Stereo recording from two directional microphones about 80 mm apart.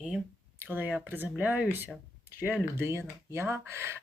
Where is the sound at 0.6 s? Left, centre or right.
Right.